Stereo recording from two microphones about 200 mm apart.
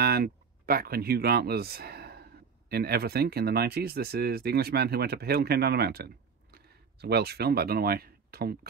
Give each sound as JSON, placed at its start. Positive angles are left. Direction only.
{"t": 0.0, "sound": "speech", "side_deg": -50}